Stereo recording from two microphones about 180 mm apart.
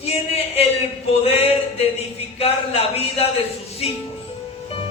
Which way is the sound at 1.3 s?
35° left (ahead or behind).